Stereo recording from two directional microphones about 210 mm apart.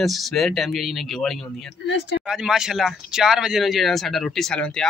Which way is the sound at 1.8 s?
55° left (ahead or behind).